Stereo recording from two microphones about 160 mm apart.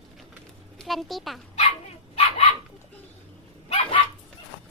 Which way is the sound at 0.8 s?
Centre (ahead or behind).